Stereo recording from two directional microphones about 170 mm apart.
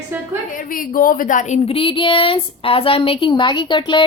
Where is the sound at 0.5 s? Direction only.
55° left (ahead or behind).